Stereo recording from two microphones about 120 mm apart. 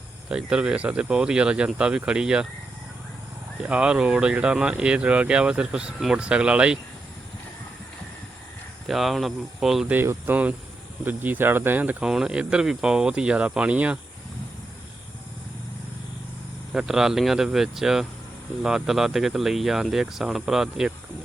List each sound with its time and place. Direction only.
0.3 s speech: 5° right (ahead or behind)
3.6 s speech: 10° right (ahead or behind)
8.9 s speech: centre (ahead or behind)
9.9 s speech: 15° right (ahead or behind)
16.7 s speech: 5° right (ahead or behind)